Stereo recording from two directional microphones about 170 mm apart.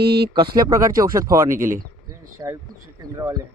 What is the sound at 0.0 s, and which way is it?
Speech, 75° right (ahead or behind).